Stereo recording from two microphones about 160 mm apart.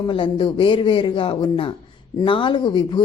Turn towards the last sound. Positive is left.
turn(degrees=30)  # may be behind; listen again after turning